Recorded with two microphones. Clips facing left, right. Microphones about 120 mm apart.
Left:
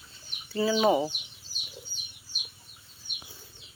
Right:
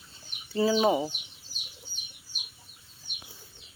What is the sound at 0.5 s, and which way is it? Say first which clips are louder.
Speech: right 2 dB; 30° right (ahead or behind).